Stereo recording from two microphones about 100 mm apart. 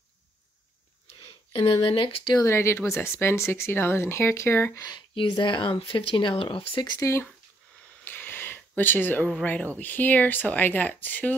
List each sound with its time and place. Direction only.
1.2 s speech: 60° left (ahead or behind)
2.4 s speech: 25° left (ahead or behind)
4.7 s speech: 40° left (ahead or behind)
5.1 s speech: 55° left (ahead or behind)
7.0 s speech: 30° left (ahead or behind)
8.0 s a sound: 20° left (ahead or behind)
9.3 s speech: 10° left (ahead or behind)